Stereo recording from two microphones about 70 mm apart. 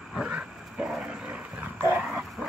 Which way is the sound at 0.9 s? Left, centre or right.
Centre.